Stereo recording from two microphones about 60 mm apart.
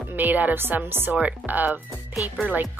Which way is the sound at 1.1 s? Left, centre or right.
Right.